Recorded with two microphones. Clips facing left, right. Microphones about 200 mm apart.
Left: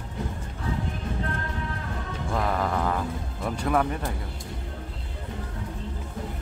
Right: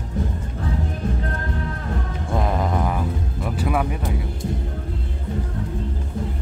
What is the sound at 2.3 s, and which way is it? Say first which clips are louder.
Music: right 3 dB; 20° right (ahead or behind).